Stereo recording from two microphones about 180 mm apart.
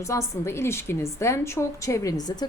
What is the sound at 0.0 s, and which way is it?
A woman's voice, 15° left (ahead or behind).